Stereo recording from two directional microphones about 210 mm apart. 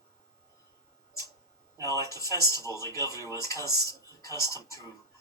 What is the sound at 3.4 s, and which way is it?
Speech, 15° left (ahead or behind).